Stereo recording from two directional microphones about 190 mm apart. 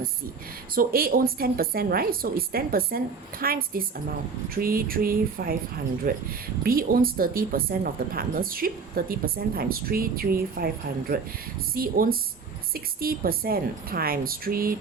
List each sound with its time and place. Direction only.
0.8 s speech: 50° right (ahead or behind)